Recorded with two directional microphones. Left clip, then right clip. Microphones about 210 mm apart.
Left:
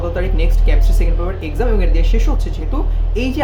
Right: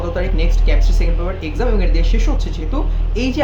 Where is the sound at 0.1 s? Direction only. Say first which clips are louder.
Even; 5° left (ahead or behind).